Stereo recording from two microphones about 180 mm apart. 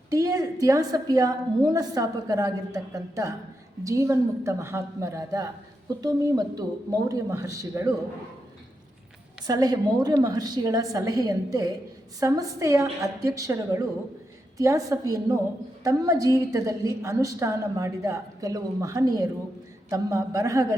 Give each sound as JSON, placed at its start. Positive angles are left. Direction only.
{"t": 0.1, "sound": "a woman's voice", "side_deg": -20}
{"t": 9.5, "sound": "a woman's voice", "side_deg": -20}